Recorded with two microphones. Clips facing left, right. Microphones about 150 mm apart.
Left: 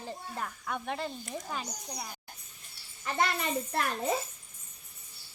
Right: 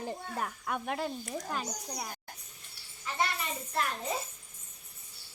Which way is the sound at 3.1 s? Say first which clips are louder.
Left 4 dB; 55° left (ahead or behind).